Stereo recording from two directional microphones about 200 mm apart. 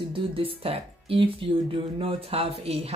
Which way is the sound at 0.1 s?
30° right (ahead or behind).